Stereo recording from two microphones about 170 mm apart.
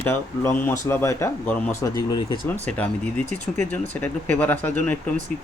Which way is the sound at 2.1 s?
20° left (ahead or behind).